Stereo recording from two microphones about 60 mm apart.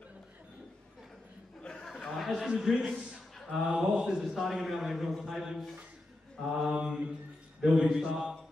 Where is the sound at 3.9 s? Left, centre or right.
Centre.